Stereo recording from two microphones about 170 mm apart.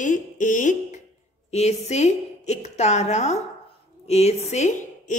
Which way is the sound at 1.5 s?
40° left (ahead or behind).